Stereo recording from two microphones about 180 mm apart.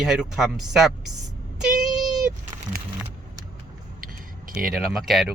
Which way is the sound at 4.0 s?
50° right (ahead or behind).